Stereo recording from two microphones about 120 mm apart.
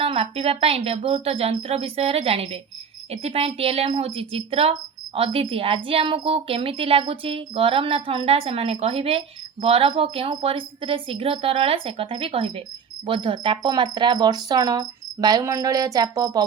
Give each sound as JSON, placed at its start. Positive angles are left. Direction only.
{"t": 0.0, "sound": "a woman's voice", "side_deg": -55}